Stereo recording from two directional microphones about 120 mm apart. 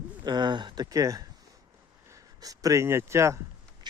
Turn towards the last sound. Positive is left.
turn(degrees=-25)  # may be behind; listen again after turning